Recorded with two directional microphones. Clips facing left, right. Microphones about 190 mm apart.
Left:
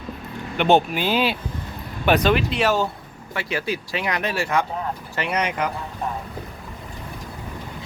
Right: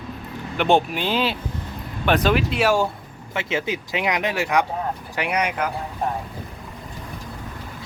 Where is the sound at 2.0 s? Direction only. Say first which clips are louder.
Left 1 dB; centre (ahead or behind).